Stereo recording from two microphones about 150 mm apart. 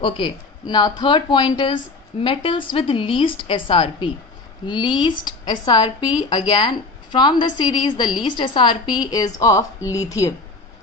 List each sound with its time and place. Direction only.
0.0 s a woman's voice: 30° left (ahead or behind)